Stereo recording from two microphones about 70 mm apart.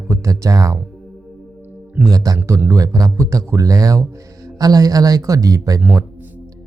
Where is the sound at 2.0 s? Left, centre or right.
Right.